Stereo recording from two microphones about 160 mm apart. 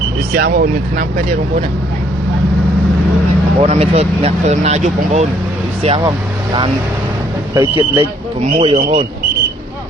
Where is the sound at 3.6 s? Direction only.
40° right (ahead or behind).